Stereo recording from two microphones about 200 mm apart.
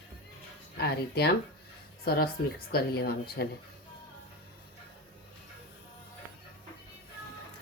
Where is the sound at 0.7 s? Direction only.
55° left (ahead or behind).